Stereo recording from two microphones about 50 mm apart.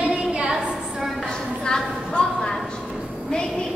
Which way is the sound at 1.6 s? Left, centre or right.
Centre.